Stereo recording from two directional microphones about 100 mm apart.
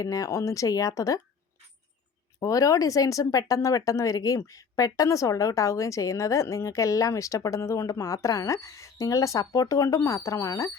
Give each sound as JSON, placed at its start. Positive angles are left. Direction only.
{"t": 0.0, "sound": "speech", "side_deg": 35}
{"t": 2.4, "sound": "speech", "side_deg": 35}